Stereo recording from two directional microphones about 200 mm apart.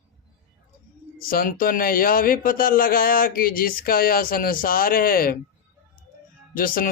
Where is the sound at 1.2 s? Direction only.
45° left (ahead or behind).